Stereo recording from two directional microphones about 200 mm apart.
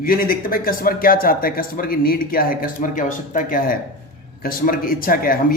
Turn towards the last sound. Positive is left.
turn(degrees=45)  # may be behind; listen again after turning